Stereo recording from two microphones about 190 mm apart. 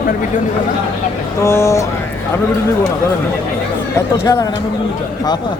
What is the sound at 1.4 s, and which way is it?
Speech, 15° left (ahead or behind).